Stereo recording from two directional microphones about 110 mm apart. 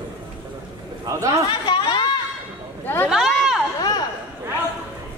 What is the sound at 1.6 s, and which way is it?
Chatter, 45° left (ahead or behind).